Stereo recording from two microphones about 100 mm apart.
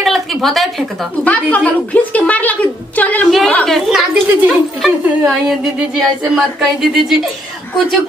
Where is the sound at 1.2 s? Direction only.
15° left (ahead or behind).